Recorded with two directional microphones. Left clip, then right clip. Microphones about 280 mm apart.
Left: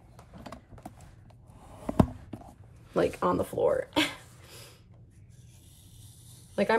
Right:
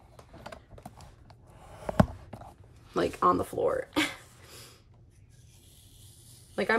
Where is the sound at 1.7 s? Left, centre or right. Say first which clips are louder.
Right 1 dB; left.